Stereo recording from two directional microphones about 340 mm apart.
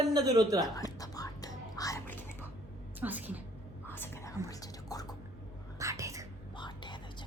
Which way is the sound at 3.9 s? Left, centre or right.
Centre.